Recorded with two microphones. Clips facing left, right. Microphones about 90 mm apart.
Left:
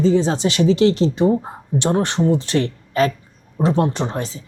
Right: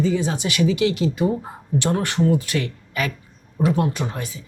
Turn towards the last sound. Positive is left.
turn(degrees=30)  # may be behind; listen again after turning